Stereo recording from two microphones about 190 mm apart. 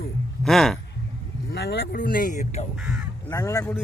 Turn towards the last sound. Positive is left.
turn(degrees=15)  # may be behind; listen again after turning